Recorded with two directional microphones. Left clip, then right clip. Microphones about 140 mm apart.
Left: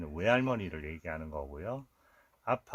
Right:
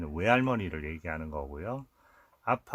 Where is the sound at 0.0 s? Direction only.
30° right (ahead or behind).